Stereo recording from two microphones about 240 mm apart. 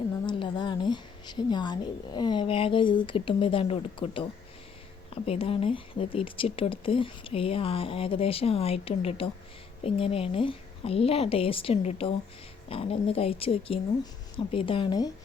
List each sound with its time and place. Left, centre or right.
0.3 s speech: centre